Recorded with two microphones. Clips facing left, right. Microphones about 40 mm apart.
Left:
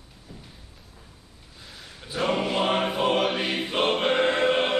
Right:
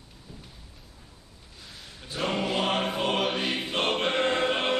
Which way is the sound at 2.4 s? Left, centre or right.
Centre.